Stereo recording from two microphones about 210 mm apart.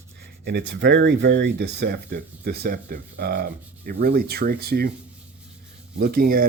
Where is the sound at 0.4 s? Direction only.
55° right (ahead or behind).